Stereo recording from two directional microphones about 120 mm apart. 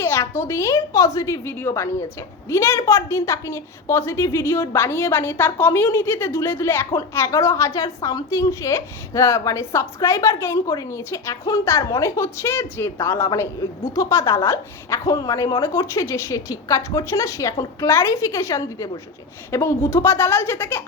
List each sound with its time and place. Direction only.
0.0 s a woman's voice: 20° left (ahead or behind)